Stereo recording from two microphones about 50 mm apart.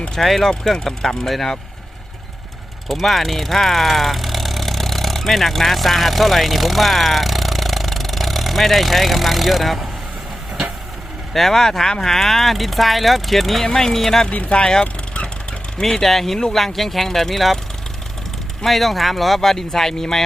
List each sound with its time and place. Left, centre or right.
0.2 s speech: centre
2.9 s speech: centre
11.3 s speech: centre
14.3 s speech: left
14.7 s vehicle: centre
15.8 s speech: centre
18.6 s speech: centre